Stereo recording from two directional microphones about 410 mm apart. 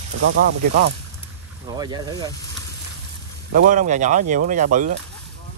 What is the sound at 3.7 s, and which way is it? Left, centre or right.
Speech, centre.